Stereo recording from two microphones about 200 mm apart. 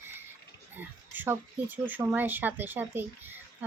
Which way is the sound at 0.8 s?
10° right (ahead or behind).